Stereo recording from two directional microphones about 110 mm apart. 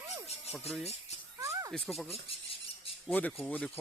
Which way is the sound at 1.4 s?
30° right (ahead or behind).